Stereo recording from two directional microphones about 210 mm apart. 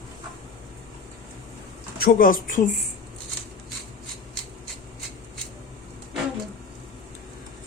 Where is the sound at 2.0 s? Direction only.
40° left (ahead or behind).